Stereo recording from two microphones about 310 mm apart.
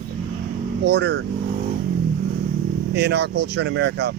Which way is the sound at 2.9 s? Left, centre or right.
Right.